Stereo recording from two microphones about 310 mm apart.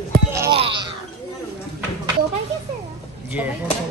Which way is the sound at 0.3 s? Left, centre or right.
Centre.